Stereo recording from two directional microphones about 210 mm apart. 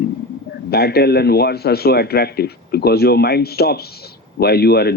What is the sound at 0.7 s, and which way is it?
A man's voice, 50° left (ahead or behind).